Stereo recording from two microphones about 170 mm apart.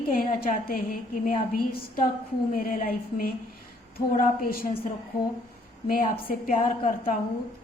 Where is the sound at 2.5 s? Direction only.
55° left (ahead or behind).